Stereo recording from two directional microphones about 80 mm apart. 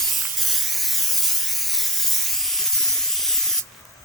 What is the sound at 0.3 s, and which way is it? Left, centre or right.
Spray, centre.